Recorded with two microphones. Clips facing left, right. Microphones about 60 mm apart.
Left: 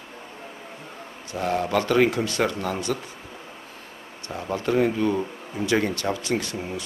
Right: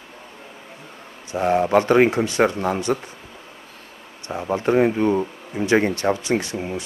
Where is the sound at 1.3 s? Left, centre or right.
Right.